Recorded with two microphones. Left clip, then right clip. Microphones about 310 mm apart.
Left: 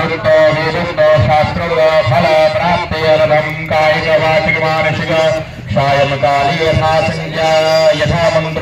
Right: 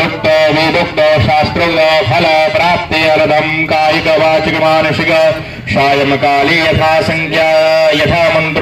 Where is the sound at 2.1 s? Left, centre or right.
Right.